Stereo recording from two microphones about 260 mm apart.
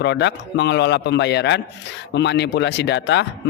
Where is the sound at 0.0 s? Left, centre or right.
Left.